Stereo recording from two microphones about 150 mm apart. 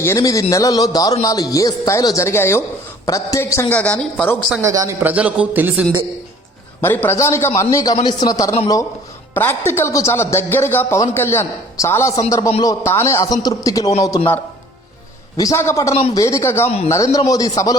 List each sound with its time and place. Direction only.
0.0 s a man's voice: 20° left (ahead or behind)
4.6 s a man's voice: 20° right (ahead or behind)
5.0 s a man's voice: 10° right (ahead or behind)
6.8 s a man's voice: 15° left (ahead or behind)
15.4 s speech: 20° left (ahead or behind)